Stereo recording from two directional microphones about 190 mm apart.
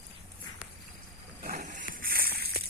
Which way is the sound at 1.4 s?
45° right (ahead or behind).